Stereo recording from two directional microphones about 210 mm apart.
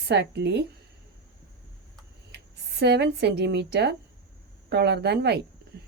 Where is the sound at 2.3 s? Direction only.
50° right (ahead or behind).